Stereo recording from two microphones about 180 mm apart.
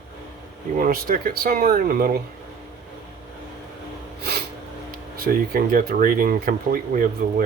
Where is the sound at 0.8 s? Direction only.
50° right (ahead or behind).